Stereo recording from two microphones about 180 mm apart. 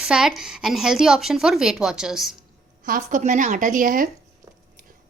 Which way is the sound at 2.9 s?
45° right (ahead or behind).